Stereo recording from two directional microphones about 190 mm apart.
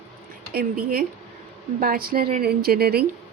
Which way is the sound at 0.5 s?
50° right (ahead or behind).